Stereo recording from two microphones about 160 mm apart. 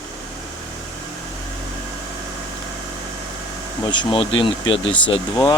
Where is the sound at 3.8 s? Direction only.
30° left (ahead or behind).